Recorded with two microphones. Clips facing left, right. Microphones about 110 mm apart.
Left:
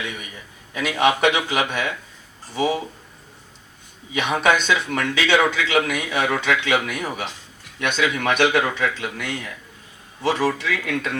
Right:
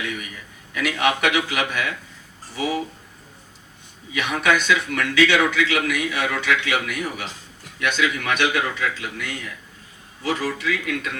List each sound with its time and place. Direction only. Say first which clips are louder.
0.7 s a man's voice: left 2 dB; 30° left (ahead or behind)
4.1 s a man's voice: left 2 dB; 30° left (ahead or behind)